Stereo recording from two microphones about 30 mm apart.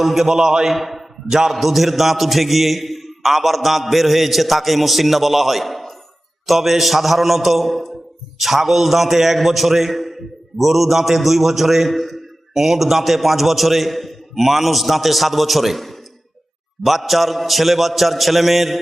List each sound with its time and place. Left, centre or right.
0.0 s a man's voice: centre
0.3 s a man's voice: centre
0.8 s a man's voice: centre